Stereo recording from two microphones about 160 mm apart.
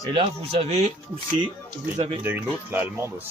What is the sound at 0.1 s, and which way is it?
Speech, 35° right (ahead or behind).